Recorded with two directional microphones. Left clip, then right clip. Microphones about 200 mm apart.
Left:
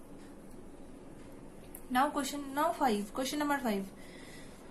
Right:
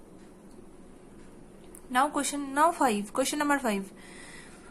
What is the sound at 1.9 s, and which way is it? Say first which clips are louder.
A woman's voice: right 4 dB; 25° right (ahead or behind).